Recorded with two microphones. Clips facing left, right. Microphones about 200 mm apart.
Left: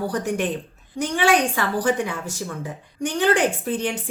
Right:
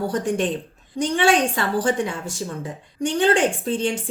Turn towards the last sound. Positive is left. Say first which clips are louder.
# right 2 dB
turn(degrees=-25)  # may be behind; listen again after turning